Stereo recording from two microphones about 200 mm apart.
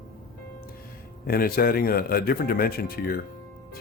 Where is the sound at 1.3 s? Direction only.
50° left (ahead or behind).